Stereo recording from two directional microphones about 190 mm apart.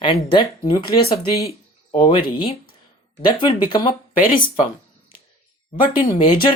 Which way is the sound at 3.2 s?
25° left (ahead or behind).